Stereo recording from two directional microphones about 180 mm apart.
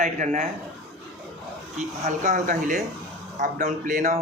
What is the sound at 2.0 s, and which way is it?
Speech, 40° right (ahead or behind).